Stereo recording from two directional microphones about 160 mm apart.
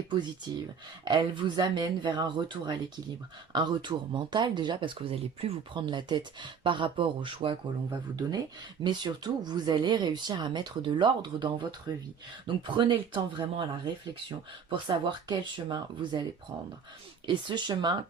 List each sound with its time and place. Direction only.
1.0 s speech: 30° right (ahead or behind)
17.2 s speech: 30° right (ahead or behind)